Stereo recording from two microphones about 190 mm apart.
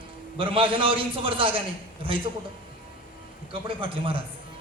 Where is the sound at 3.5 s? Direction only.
30° right (ahead or behind).